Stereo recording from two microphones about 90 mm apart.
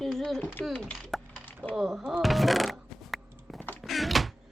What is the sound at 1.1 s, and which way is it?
Mechanisms, centre (ahead or behind).